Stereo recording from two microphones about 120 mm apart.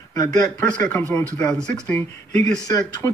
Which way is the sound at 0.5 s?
10° left (ahead or behind).